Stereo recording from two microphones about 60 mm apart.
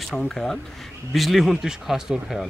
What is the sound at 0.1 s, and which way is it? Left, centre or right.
Speech, centre.